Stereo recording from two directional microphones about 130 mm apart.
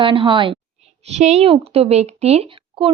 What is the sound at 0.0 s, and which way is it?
Speech, 40° right (ahead or behind).